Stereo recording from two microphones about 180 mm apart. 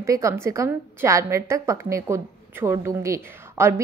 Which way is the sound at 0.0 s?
15° right (ahead or behind).